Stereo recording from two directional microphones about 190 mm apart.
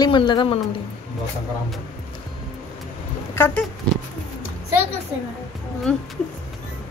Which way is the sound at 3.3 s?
10° left (ahead or behind).